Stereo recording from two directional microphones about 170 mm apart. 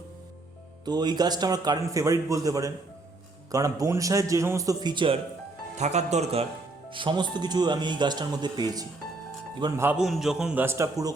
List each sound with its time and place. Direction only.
0.9 s speech: 25° right (ahead or behind)
5.7 s a man's voice: 40° right (ahead or behind)
6.9 s speech: 30° right (ahead or behind)
9.8 s a man's voice: 5° right (ahead or behind)